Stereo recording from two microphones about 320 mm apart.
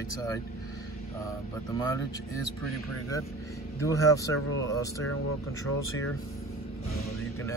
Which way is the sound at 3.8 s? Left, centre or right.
Centre.